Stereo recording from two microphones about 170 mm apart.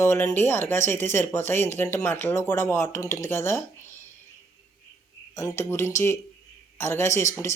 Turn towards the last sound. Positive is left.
turn(degrees=15)  # may be behind; listen again after turning